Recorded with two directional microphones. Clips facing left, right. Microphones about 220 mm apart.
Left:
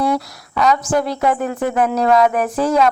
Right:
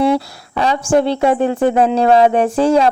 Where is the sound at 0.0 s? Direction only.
30° right (ahead or behind).